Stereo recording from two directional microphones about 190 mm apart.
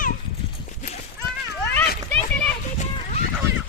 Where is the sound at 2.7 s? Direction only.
35° left (ahead or behind).